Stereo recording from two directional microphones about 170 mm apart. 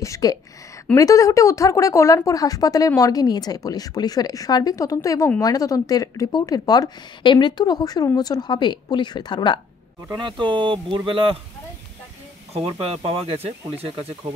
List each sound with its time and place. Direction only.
0.0 s speech: 20° left (ahead or behind)
10.2 s speech: 30° right (ahead or behind)
12.5 s speech: 35° right (ahead or behind)